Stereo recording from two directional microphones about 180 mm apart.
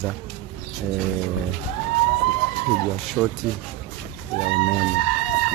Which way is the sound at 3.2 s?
10° right (ahead or behind).